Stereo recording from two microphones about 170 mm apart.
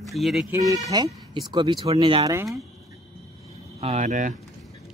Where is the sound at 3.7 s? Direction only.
40° right (ahead or behind).